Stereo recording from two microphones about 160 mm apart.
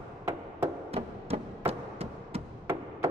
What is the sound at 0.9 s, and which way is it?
Music, 40° right (ahead or behind).